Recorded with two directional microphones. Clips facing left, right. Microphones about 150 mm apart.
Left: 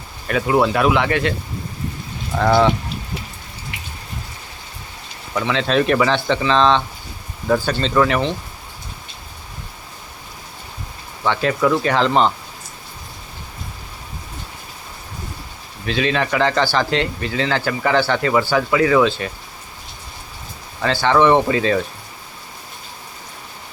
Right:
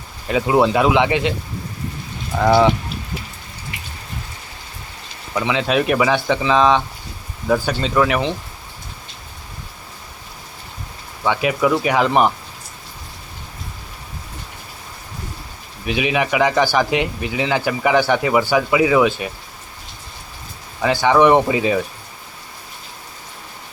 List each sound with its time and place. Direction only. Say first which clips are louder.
0.3 s speech: right 1 dB; 20° right (ahead or behind)
2.4 s speech: right 1 dB; 10° right (ahead or behind)
5.3 s speech: even; 5° right (ahead or behind)
11.2 s speech: even; 10° right (ahead or behind)
15.9 s speech: even; 15° right (ahead or behind)
20.8 s speech: right 1 dB; 15° right (ahead or behind)